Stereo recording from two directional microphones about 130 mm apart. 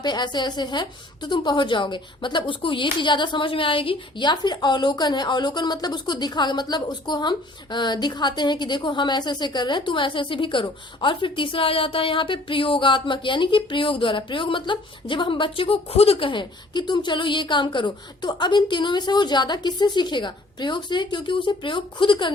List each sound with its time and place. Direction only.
0.0 s a woman's voice: 35° left (ahead or behind)